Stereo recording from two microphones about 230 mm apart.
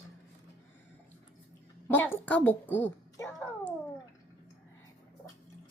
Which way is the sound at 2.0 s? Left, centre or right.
Centre.